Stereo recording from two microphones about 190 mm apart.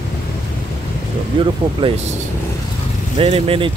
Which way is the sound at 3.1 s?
30° right (ahead or behind).